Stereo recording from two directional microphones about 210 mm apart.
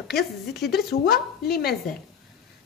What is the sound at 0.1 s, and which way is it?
Speech, 50° left (ahead or behind).